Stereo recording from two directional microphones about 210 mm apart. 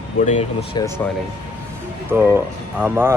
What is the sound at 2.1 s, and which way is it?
Speech, 10° right (ahead or behind).